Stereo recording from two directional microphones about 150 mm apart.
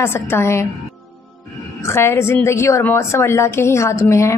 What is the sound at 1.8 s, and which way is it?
A woman's voice, 15° left (ahead or behind).